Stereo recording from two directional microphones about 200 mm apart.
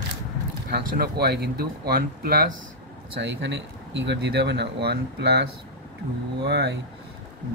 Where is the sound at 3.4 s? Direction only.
65° right (ahead or behind).